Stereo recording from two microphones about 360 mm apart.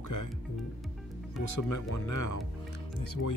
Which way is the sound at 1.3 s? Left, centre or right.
Left.